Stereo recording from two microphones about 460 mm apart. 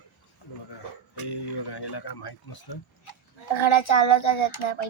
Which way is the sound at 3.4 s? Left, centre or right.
Left.